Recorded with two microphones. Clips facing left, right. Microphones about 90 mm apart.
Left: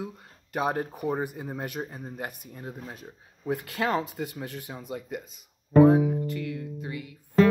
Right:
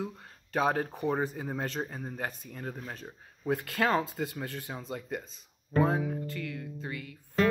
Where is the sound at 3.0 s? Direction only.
30° right (ahead or behind).